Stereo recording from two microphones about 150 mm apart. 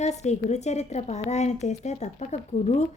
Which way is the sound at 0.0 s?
50° left (ahead or behind).